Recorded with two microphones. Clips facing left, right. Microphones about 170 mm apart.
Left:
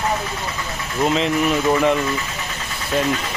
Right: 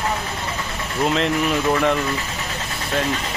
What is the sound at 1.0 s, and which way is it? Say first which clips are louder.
Speech: left 2 dB; centre (ahead or behind).